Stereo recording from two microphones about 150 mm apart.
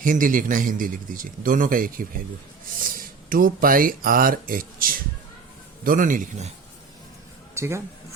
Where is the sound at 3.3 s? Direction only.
70° right (ahead or behind).